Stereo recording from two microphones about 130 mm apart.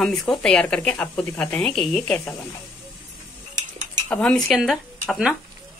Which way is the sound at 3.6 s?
70° right (ahead or behind).